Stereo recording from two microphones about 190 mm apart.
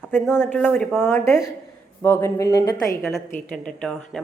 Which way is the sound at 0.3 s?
5° left (ahead or behind).